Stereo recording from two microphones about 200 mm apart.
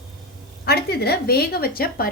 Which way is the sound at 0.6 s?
55° left (ahead or behind).